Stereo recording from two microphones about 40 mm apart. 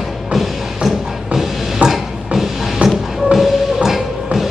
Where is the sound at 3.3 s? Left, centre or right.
Centre.